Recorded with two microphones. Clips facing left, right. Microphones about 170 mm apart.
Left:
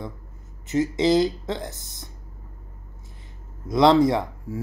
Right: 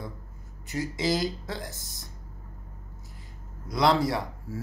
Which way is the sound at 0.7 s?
25° left (ahead or behind).